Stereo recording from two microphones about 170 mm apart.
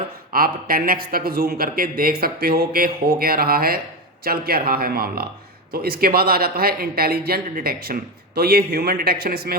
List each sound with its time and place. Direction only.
0.3 s speech: 60° right (ahead or behind)